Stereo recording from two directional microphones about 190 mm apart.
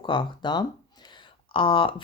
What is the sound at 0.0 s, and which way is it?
Speech, 25° left (ahead or behind).